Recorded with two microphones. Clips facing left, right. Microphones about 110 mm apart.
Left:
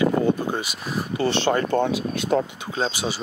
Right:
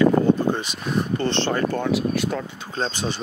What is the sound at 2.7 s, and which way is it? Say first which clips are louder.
Speech: left 1 dB; 10° left (ahead or behind).